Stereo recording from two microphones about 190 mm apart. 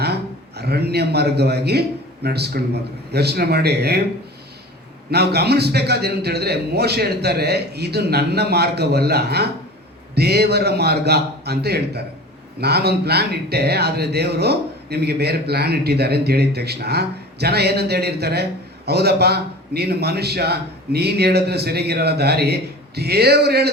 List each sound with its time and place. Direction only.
0.0 s a man's voice: 60° right (ahead or behind)
5.1 s speech: 60° right (ahead or behind)